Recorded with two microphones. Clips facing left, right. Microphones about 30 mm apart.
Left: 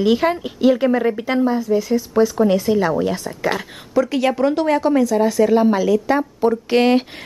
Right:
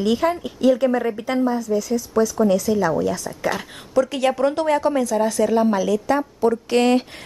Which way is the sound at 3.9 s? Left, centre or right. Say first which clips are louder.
Left 1 dB; centre.